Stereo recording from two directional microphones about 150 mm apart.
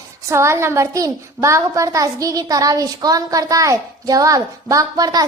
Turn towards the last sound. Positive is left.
turn(degrees=-25)  # may be behind; listen again after turning